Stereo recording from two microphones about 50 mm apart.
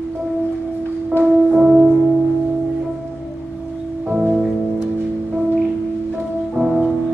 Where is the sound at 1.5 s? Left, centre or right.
Centre.